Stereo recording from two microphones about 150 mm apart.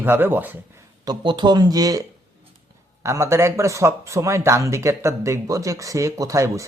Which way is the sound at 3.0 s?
20° right (ahead or behind).